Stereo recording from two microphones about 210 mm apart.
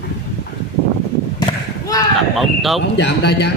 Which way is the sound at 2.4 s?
Centre (ahead or behind).